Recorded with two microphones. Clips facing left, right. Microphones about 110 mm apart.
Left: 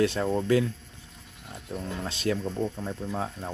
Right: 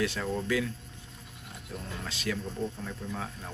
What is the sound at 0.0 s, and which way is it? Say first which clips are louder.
Speech: left 6 dB; 30° left (ahead or behind).